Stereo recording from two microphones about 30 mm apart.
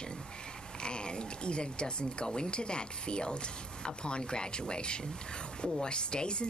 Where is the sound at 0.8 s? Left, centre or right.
Left.